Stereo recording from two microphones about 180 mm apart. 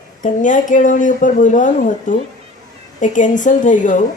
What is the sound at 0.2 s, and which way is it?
A woman's voice, 45° left (ahead or behind).